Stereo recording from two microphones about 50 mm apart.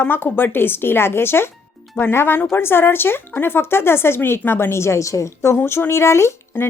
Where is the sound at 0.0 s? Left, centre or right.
Left.